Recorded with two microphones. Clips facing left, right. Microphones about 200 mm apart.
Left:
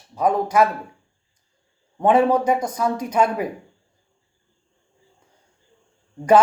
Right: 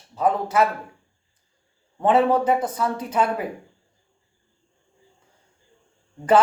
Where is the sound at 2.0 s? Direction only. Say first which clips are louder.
Left 2 dB; 15° left (ahead or behind).